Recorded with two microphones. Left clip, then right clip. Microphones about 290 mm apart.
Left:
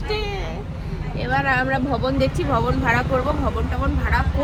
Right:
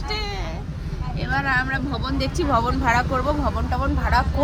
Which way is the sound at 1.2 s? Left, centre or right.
Centre.